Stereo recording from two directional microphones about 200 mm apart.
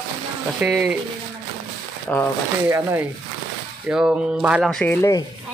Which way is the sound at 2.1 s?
10° left (ahead or behind).